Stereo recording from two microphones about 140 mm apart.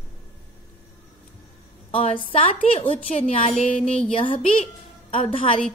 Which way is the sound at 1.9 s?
45° left (ahead or behind).